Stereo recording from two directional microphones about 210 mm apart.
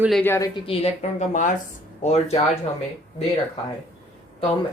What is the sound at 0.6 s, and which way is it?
Speech, 30° left (ahead or behind).